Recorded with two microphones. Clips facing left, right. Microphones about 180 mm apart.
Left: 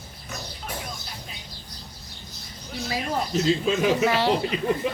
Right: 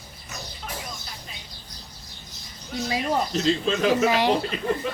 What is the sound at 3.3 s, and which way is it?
Speech, 5° left (ahead or behind).